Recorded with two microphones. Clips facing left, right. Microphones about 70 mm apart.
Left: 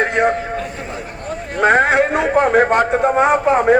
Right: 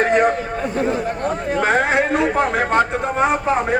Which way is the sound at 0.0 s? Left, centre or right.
Left.